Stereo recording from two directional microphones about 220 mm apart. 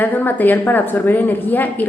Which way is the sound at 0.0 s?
10° left (ahead or behind).